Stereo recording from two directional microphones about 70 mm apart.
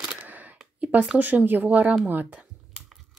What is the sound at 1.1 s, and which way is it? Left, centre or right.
Speech, right.